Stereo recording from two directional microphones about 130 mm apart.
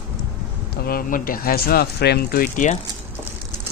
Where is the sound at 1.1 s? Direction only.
90° left.